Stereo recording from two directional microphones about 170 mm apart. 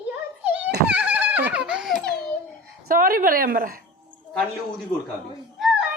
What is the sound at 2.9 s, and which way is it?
Speech, 60° right (ahead or behind).